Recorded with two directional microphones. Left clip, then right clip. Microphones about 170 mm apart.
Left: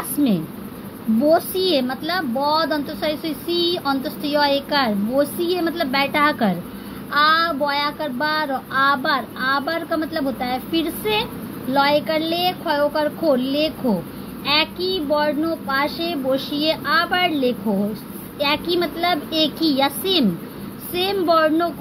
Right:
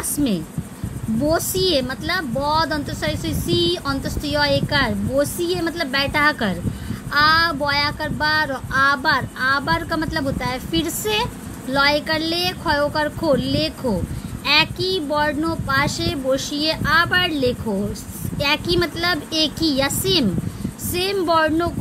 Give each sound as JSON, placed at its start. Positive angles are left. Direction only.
{"t": 1.2, "sound": "a woman's voice", "side_deg": -25}